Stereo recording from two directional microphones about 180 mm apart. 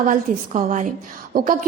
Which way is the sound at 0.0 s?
45° right (ahead or behind).